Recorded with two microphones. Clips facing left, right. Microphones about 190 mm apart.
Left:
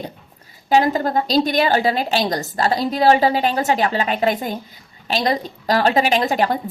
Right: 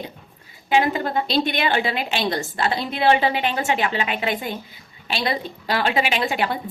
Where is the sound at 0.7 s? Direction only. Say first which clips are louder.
Left 4 dB; 40° left (ahead or behind).